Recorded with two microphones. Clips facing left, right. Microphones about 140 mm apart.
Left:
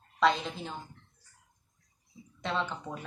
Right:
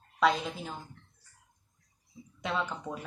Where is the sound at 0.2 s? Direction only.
5° right (ahead or behind).